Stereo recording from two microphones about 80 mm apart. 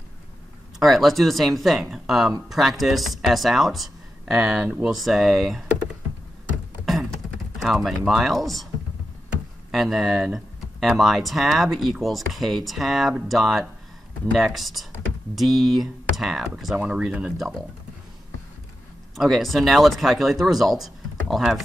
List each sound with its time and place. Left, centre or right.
0.7 s speech: centre
6.9 s typing: centre
9.7 s speech: centre
19.1 s speech: centre